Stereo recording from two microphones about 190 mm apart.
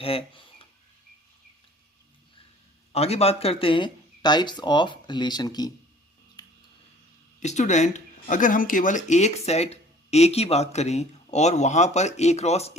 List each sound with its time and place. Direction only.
0.0 s a sound: 30° left (ahead or behind)
2.9 s speech: 35° left (ahead or behind)
6.4 s scissors: 20° left (ahead or behind)
7.3 s speech: 40° left (ahead or behind)